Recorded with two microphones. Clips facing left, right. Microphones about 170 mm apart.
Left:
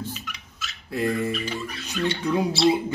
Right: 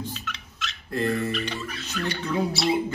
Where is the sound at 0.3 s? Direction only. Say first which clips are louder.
Right 3 dB; 5° left (ahead or behind).